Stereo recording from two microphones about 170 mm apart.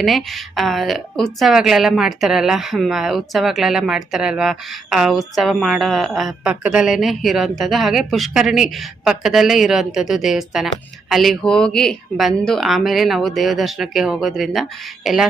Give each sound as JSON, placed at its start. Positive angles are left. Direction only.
{"t": 0.0, "sound": "a woman's voice", "side_deg": 0}